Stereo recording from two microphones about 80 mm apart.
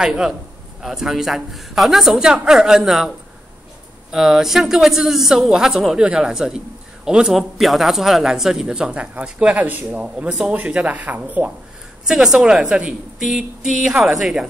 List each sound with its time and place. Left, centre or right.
0.0 s speech: centre
4.1 s speech: centre
12.1 s speech: centre